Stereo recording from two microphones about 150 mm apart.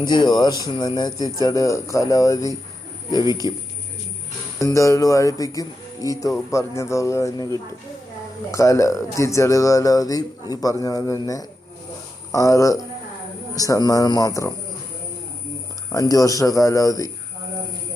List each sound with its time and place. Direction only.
0.0 s speech: 30° left (ahead or behind)
3.4 s speech: 25° right (ahead or behind)
4.6 s speech: 20° left (ahead or behind)
15.9 s speech: 20° left (ahead or behind)